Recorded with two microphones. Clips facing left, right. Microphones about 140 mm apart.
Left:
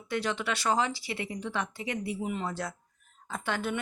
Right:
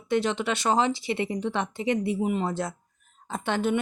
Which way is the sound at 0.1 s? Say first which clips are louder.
Right 6 dB; 20° right (ahead or behind).